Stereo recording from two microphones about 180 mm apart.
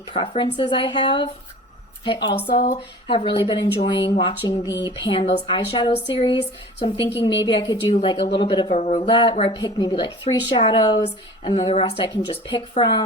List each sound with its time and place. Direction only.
0.1 s a woman's voice: 30° left (ahead or behind)